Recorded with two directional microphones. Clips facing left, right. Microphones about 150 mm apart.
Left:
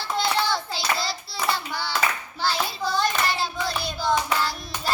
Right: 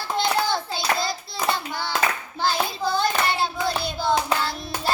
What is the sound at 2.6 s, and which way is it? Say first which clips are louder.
Hands: right 1 dB; 25° right (ahead or behind).